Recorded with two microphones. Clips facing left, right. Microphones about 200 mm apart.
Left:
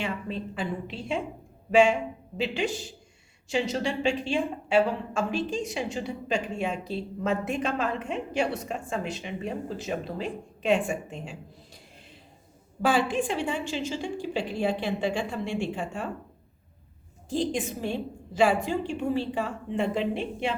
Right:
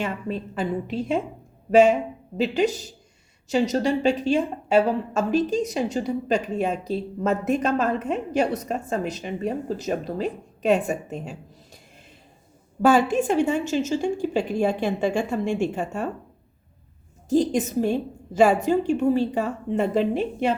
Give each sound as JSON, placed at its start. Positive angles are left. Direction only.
{"t": 0.0, "sound": "a woman's voice", "side_deg": -45}
{"t": 12.8, "sound": "a woman's voice", "side_deg": -45}
{"t": 17.2, "sound": "a woman's voice", "side_deg": -40}